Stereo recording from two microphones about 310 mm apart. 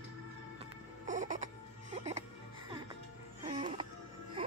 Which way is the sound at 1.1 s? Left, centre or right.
Right.